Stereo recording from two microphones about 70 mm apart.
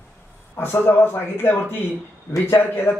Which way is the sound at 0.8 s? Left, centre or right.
Left.